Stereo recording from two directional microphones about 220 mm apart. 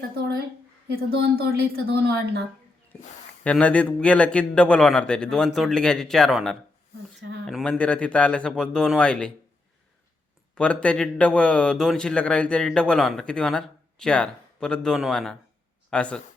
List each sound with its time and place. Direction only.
1.2 s speech: 45° right (ahead or behind)
3.4 s a man's voice: 5° left (ahead or behind)
7.2 s speech: 50° right (ahead or behind)
7.4 s a man's voice: 5° left (ahead or behind)
10.5 s a man's voice: 5° left (ahead or behind)